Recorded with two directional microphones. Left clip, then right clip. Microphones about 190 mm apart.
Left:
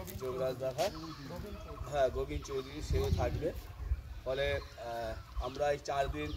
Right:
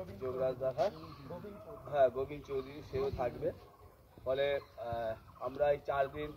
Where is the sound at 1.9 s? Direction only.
20° left (ahead or behind); by 6.3 s 5° right (ahead or behind).